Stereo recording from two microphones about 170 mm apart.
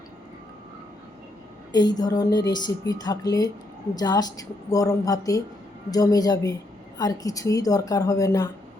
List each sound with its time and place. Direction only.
1.7 s a woman's voice: 25° left (ahead or behind)